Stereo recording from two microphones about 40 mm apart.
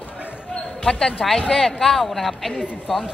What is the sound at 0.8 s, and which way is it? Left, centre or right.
A woman's voice, centre.